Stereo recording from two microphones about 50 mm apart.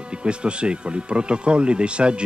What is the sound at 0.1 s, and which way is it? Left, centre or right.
Speech, right.